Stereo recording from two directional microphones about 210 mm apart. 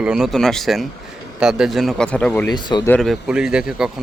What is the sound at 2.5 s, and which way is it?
Speech, 20° left (ahead or behind).